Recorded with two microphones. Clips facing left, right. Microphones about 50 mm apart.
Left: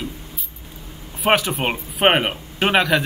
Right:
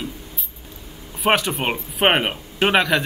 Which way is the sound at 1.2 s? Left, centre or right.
Centre.